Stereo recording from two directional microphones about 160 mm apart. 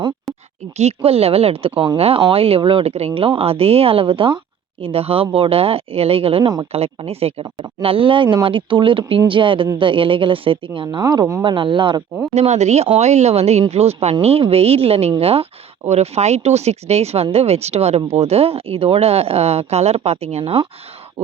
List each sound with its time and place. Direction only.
0.8 s speech: 40° right (ahead or behind)
12.3 s speech: 45° right (ahead or behind)